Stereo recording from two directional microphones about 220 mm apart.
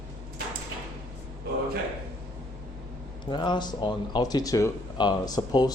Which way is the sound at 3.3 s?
20° left (ahead or behind).